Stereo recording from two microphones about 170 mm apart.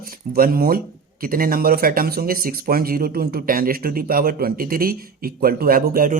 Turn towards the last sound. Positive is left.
turn(degrees=-55)  # may be behind; listen again after turning